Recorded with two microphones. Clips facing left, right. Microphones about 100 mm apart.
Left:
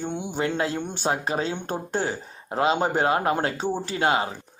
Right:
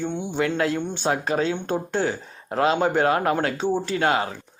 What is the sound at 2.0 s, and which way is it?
Speech, 25° left (ahead or behind).